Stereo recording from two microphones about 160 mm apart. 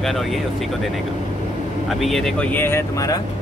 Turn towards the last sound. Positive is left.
turn(degrees=20)  # may be behind; listen again after turning